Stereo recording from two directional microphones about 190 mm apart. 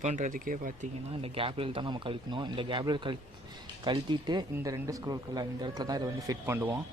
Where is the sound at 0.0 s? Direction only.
40° right (ahead or behind).